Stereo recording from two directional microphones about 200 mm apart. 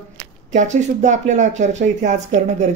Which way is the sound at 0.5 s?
35° right (ahead or behind).